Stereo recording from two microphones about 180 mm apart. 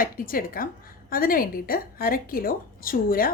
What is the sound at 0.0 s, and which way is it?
A woman's voice, 50° left (ahead or behind).